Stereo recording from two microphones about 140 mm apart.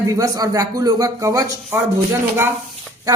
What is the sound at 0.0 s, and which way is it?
Speech, 25° right (ahead or behind).